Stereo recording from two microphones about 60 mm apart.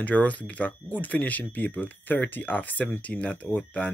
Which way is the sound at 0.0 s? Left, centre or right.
Left.